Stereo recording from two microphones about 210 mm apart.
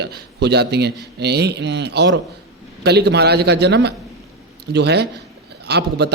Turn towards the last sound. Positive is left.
turn(degrees=-50)  # may be behind; listen again after turning